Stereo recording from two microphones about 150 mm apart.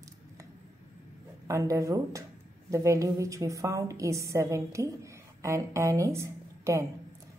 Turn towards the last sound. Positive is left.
turn(degrees=-20)  # may be behind; listen again after turning